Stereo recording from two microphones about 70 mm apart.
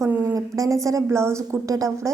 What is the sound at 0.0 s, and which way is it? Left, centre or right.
A woman's voice, right.